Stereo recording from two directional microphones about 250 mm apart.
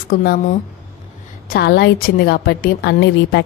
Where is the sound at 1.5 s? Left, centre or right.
Left.